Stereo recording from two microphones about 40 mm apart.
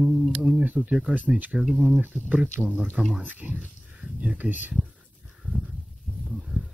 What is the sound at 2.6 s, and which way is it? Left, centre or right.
Speech, right.